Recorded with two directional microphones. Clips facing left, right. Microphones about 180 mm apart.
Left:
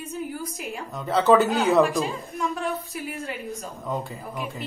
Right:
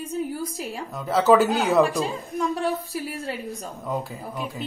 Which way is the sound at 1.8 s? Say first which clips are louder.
Even; 35° right (ahead or behind).